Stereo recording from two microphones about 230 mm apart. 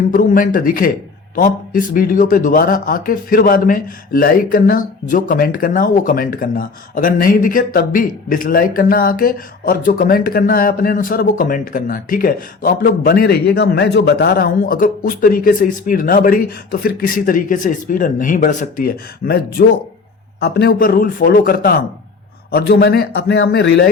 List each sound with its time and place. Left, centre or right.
0.1 s a man's voice: left